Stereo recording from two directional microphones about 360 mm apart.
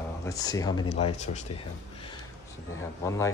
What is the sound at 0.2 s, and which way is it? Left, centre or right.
Speech, centre.